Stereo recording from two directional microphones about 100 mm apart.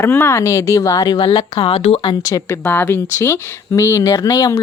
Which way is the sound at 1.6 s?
80° left.